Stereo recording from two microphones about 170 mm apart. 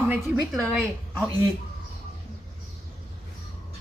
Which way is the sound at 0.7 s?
Centre (ahead or behind).